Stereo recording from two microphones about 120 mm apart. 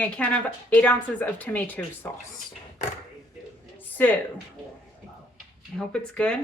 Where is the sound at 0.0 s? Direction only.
10° left (ahead or behind).